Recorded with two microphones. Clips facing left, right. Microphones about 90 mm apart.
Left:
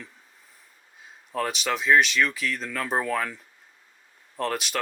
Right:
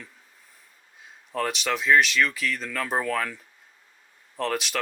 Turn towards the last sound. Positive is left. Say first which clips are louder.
# right 1 dB
turn(degrees=0)  # may be behind; listen again after turning